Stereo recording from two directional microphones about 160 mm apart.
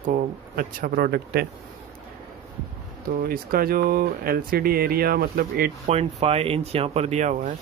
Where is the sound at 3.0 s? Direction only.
65° right (ahead or behind).